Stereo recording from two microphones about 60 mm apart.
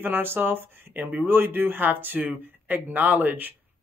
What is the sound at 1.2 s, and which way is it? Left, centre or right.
A woman's voice, right.